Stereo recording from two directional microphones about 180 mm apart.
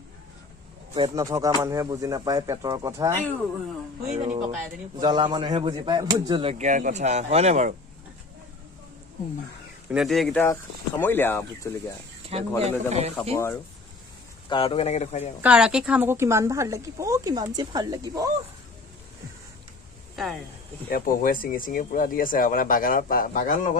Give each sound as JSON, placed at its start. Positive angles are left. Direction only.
{"t": 0.9, "sound": "speech", "side_deg": -20}
{"t": 4.1, "sound": "speech", "side_deg": -40}
{"t": 5.0, "sound": "speech", "side_deg": -25}
{"t": 6.6, "sound": "speech", "side_deg": -45}
{"t": 9.8, "sound": "speech", "side_deg": 0}
{"t": 10.4, "sound": "speech", "side_deg": 15}
{"t": 12.3, "sound": "speech", "side_deg": -35}
{"t": 13.1, "sound": "speech", "side_deg": 15}
{"t": 14.5, "sound": "speech", "side_deg": 30}
{"t": 15.4, "sound": "a woman's voice", "side_deg": -5}
{"t": 20.9, "sound": "speech", "side_deg": 55}